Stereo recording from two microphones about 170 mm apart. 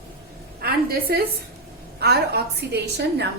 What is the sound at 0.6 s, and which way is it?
A woman's voice, 65° right (ahead or behind).